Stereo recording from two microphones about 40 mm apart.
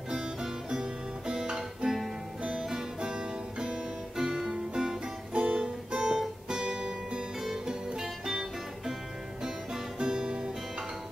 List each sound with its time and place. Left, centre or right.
0.1 s music: centre
7.4 s music: centre
9.9 s music: right